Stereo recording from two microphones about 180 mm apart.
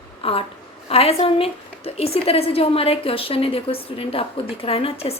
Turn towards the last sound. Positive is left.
turn(degrees=35)  # may be behind; listen again after turning